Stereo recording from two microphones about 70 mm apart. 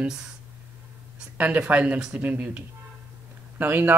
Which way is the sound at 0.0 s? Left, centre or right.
Centre.